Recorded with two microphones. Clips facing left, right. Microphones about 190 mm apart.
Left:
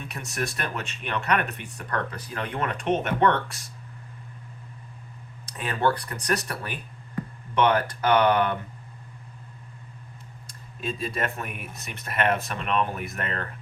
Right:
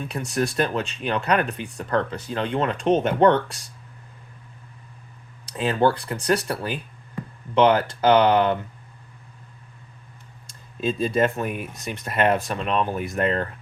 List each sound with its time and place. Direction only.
0.1 s speech: 30° right (ahead or behind)
5.6 s speech: 25° right (ahead or behind)
10.8 s speech: 30° right (ahead or behind)